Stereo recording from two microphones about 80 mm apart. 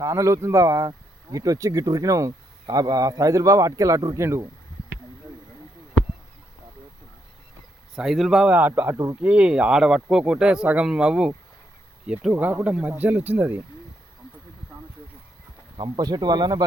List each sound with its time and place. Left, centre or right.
0.0 s speech: right
7.9 s speech: centre
8.5 s speech: right
12.3 s speech: right
16.0 s speech: right